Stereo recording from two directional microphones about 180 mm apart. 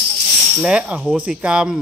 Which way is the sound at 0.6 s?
5° right (ahead or behind).